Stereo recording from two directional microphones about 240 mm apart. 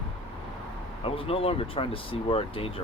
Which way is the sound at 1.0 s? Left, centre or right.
Left.